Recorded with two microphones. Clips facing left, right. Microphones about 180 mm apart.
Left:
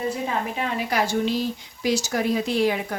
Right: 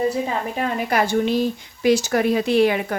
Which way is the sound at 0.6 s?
50° right (ahead or behind).